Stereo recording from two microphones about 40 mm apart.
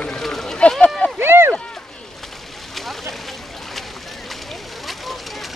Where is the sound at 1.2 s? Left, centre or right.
Right.